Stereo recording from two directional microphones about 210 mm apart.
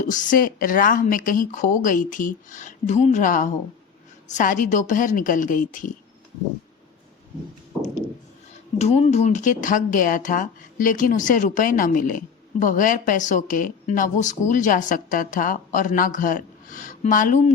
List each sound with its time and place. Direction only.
0.0 s speech: 40° left (ahead or behind)
8.8 s speech: 30° left (ahead or behind)